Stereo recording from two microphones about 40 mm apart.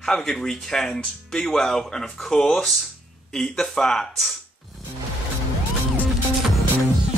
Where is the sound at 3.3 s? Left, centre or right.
Centre.